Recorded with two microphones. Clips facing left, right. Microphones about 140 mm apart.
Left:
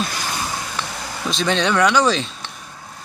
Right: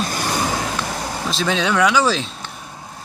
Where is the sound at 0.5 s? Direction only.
85° right.